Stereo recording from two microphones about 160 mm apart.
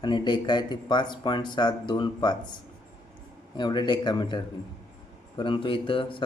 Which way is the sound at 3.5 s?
30° left (ahead or behind).